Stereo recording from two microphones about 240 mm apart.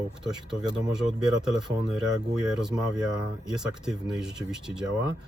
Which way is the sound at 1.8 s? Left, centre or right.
Centre.